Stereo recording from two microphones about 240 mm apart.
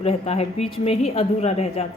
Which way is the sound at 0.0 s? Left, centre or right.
Left.